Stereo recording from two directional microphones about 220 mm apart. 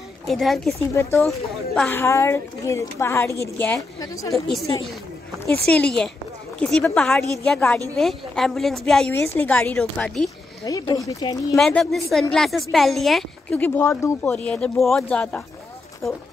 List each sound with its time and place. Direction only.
0.3 s a woman's voice: centre (ahead or behind)
1.8 s a woman's voice: 10° left (ahead or behind)
4.3 s a woman's voice: centre (ahead or behind)
5.7 s a woman's voice: 5° left (ahead or behind)
10.6 s a woman's voice: 15° left (ahead or behind)
11.5 s a woman's voice: centre (ahead or behind)